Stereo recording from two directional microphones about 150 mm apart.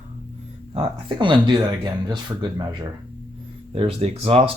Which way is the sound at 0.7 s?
35° right (ahead or behind).